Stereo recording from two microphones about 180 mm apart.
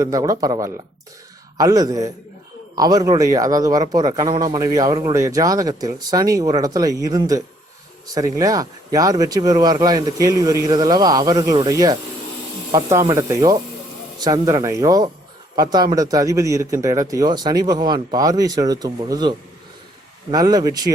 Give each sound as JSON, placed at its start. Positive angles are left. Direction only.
{"t": 0.0, "sound": "speech", "side_deg": -20}